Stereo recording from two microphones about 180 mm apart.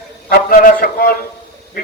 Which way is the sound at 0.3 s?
55° left (ahead or behind).